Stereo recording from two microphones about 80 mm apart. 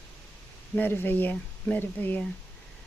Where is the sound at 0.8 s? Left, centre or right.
Left.